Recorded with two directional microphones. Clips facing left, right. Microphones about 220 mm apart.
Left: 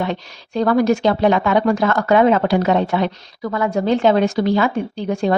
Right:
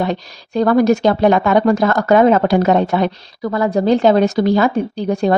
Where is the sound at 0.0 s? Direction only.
40° right (ahead or behind).